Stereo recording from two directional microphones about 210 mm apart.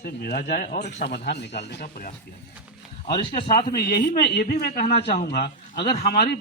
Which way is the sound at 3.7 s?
45° left (ahead or behind).